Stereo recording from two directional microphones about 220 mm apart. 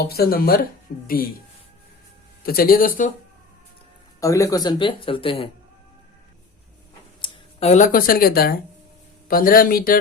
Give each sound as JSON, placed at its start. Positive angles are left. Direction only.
{"t": 0.0, "sound": "speech", "side_deg": 45}
{"t": 2.4, "sound": "speech", "side_deg": 45}
{"t": 4.2, "sound": "speech", "side_deg": 15}
{"t": 7.2, "sound": "speech", "side_deg": 30}